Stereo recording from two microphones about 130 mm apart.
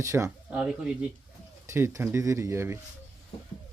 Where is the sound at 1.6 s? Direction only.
20° right (ahead or behind).